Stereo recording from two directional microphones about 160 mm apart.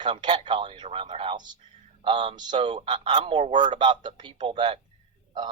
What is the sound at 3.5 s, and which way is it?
Speech, 50° right (ahead or behind).